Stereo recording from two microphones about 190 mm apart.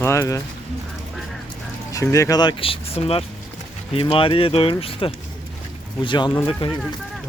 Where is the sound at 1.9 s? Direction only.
15° left (ahead or behind).